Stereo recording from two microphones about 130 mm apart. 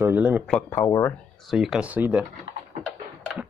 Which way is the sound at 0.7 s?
20° left (ahead or behind).